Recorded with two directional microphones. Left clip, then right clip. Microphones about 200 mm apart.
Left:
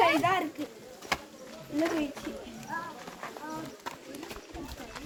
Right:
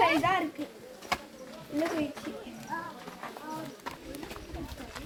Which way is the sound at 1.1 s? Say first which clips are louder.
Even; 45° left (ahead or behind).